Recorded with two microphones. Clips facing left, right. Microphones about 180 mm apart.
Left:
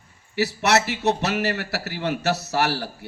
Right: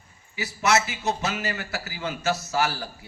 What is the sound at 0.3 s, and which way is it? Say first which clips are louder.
A man's voice: left 3 dB; 65° left (ahead or behind).